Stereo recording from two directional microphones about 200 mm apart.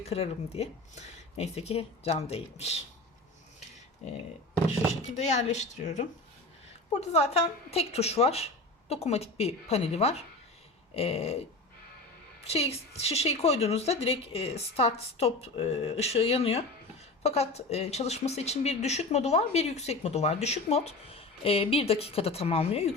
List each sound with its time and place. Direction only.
0.0 s speech: 30° left (ahead or behind)
5.0 s speech: 35° left (ahead or behind)
12.5 s speech: 30° left (ahead or behind)